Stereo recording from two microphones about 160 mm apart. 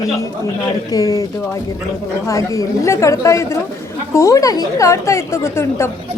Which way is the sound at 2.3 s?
20° left (ahead or behind).